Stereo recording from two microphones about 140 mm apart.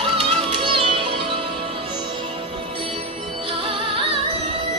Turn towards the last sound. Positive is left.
turn(degrees=-40)  # may be behind; listen again after turning